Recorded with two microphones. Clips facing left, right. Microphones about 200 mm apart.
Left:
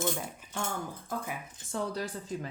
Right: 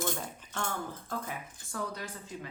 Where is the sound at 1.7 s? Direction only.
30° left (ahead or behind).